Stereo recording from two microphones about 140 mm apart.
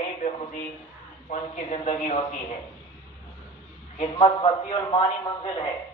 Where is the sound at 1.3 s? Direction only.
55° left (ahead or behind).